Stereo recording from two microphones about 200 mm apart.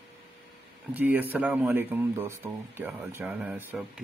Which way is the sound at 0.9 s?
10° right (ahead or behind).